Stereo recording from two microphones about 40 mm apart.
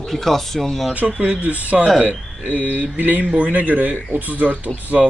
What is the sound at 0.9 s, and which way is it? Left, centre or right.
Speech, right.